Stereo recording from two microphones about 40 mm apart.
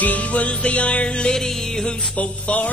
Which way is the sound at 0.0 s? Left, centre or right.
Left.